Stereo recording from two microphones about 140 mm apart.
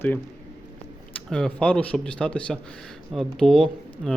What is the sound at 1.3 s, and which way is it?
Speech, 5° left (ahead or behind).